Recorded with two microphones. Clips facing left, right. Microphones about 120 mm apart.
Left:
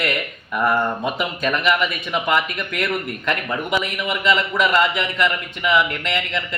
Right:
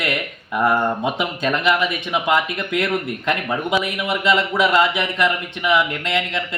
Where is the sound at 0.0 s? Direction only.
20° right (ahead or behind).